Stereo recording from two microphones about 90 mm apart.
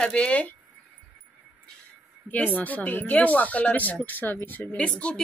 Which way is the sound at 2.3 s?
15° left (ahead or behind).